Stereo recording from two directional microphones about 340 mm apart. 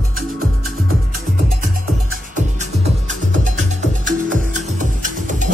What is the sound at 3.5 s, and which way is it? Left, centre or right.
Music, right.